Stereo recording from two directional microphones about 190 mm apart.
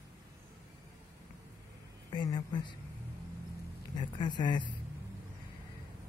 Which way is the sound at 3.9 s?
20° left (ahead or behind).